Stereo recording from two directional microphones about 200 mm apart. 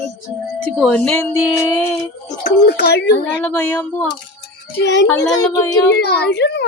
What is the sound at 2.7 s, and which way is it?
Speech, 55° left (ahead or behind).